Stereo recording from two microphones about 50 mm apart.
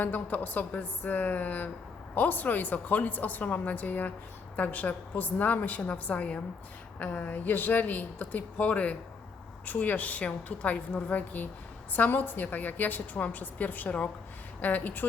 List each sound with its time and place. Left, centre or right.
0.0 s a woman's voice: left